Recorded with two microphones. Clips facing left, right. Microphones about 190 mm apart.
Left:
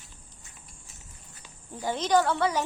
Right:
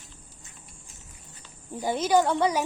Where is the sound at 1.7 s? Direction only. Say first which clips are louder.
Right 2 dB; 10° right (ahead or behind).